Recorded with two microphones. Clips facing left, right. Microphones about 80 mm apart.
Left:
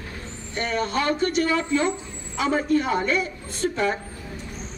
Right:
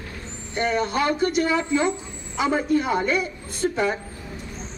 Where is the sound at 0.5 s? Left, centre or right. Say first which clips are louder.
Right 2 dB; centre.